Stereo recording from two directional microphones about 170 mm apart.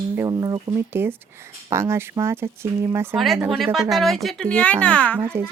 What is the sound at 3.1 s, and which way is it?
Speech, centre (ahead or behind).